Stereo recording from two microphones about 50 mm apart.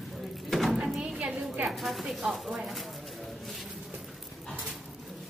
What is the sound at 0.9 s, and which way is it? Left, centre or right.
Music, centre.